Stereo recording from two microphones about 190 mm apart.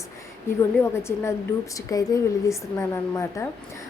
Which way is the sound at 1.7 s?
20° left (ahead or behind).